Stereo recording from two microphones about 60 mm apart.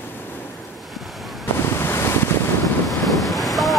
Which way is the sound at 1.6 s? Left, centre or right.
Left.